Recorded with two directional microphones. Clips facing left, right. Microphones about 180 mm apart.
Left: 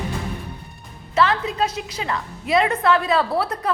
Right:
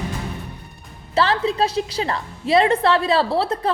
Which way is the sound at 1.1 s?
30° right (ahead or behind).